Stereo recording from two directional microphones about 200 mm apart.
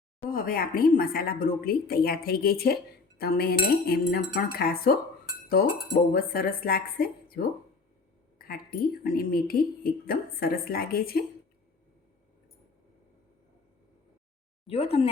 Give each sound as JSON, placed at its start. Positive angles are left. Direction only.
{"t": 0.3, "sound": "a woman's voice", "side_deg": 45}
{"t": 6.1, "sound": "a woman's voice", "side_deg": 45}
{"t": 14.7, "sound": "speech", "side_deg": 30}